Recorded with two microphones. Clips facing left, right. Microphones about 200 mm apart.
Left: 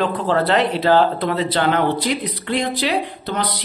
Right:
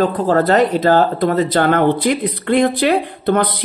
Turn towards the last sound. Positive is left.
turn(degrees=-55)  # may be behind; listen again after turning